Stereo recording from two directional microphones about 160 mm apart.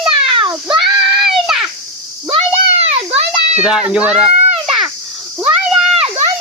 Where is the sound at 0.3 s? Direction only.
30° right (ahead or behind).